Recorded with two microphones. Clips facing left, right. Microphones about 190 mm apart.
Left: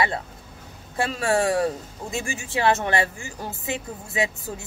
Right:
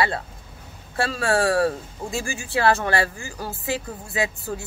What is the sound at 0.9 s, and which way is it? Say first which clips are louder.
Speech: even; 15° left (ahead or behind).